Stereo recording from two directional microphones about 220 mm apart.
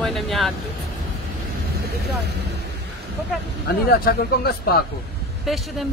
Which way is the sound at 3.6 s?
45° left (ahead or behind).